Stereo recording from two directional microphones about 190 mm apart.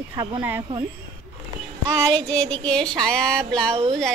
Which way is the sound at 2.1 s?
5° left (ahead or behind).